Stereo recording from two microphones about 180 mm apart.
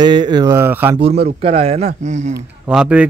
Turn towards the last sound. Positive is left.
turn(degrees=-5)  # may be behind; listen again after turning